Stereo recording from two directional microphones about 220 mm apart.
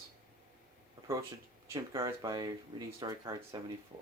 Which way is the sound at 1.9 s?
15° right (ahead or behind).